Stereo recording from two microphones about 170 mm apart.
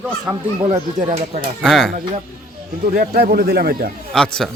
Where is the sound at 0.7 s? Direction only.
45° right (ahead or behind).